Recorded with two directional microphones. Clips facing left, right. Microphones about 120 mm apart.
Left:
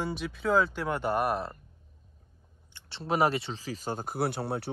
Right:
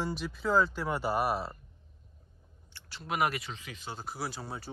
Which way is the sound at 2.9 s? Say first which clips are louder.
Left 5 dB; 30° left (ahead or behind).